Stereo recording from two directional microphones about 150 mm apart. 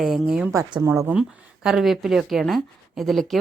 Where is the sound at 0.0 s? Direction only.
Centre (ahead or behind).